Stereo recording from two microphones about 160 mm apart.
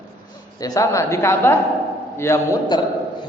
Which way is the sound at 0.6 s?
20° left (ahead or behind).